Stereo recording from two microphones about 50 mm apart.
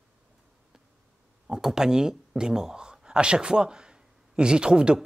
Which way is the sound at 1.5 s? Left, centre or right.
Centre.